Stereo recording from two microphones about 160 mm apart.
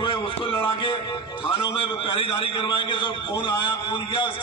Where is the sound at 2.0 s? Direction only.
35° left (ahead or behind).